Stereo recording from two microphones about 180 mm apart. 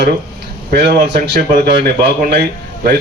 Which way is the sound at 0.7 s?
60° right (ahead or behind).